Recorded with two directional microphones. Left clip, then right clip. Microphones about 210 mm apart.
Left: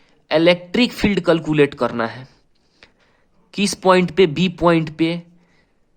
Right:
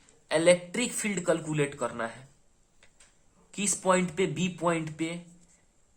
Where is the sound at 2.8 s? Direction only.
45° left (ahead or behind).